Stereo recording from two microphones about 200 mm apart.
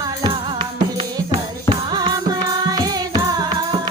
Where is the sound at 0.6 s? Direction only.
25° right (ahead or behind).